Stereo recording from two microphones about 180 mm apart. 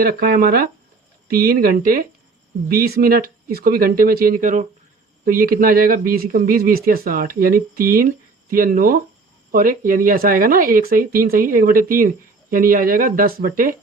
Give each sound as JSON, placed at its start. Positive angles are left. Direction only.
{"t": 0.0, "sound": "speech", "side_deg": -55}